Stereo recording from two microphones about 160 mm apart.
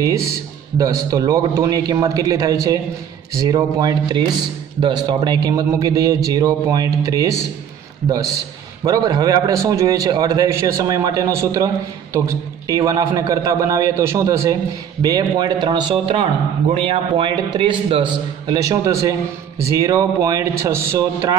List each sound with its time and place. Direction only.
0.0 s a man's voice: 20° right (ahead or behind)